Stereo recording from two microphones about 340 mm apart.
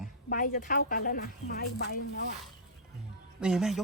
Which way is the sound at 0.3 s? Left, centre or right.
Left.